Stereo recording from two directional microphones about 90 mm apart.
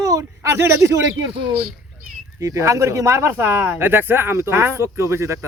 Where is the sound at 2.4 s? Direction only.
35° right (ahead or behind).